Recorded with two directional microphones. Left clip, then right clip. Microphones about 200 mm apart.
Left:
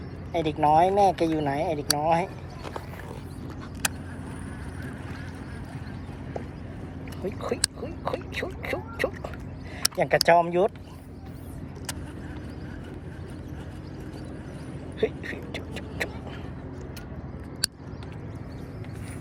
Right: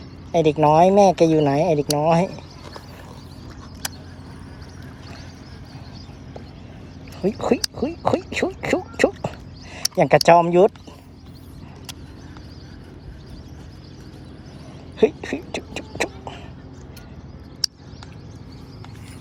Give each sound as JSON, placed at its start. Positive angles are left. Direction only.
{"t": 0.3, "sound": "speech", "side_deg": -60}
{"t": 7.3, "sound": "speech", "side_deg": -55}
{"t": 14.9, "sound": "a sound", "side_deg": -55}